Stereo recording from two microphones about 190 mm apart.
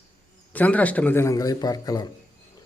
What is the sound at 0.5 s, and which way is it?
A man's voice, 10° left (ahead or behind).